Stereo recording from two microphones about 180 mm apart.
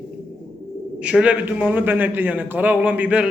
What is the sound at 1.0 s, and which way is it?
A man's voice, 5° right (ahead or behind).